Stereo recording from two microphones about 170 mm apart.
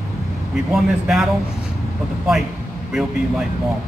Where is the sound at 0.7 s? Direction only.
Centre (ahead or behind).